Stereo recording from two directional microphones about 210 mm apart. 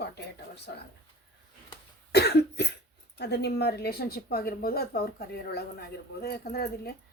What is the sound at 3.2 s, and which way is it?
Speech, 50° left (ahead or behind).